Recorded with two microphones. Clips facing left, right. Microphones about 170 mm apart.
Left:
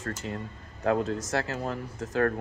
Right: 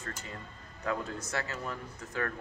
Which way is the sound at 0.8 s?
75° left (ahead or behind).